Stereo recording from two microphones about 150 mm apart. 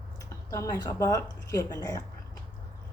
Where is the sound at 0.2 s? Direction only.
20° left (ahead or behind).